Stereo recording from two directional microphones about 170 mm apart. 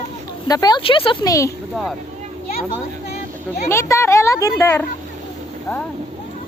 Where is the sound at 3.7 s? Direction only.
15° left (ahead or behind).